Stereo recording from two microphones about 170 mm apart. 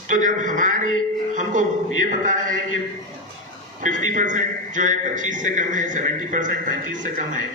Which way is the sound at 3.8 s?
50° right (ahead or behind).